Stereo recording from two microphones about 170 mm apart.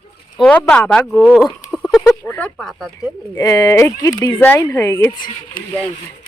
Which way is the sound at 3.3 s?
20° left (ahead or behind).